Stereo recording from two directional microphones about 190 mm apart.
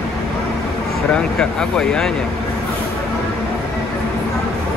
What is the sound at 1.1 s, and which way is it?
Speech, 5° left (ahead or behind).